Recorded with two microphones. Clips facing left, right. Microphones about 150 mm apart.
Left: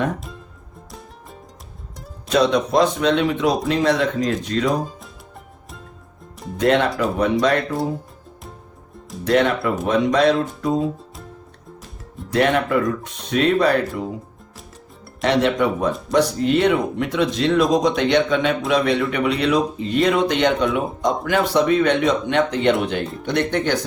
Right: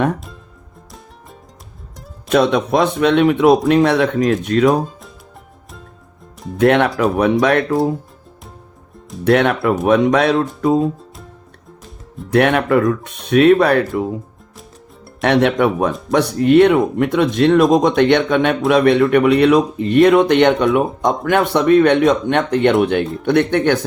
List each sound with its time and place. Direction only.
0.9 s music: centre (ahead or behind)
2.3 s speech: 55° right (ahead or behind)
6.6 s speech: 60° right (ahead or behind)
9.2 s speech: 65° right (ahead or behind)
12.3 s speech: 60° right (ahead or behind)
15.2 s speech: 60° right (ahead or behind)